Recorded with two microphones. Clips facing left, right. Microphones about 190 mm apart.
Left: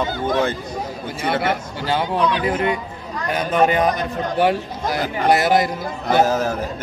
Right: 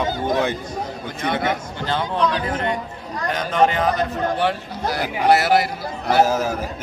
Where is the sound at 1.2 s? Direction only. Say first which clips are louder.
Left 1 dB; 5° left (ahead or behind).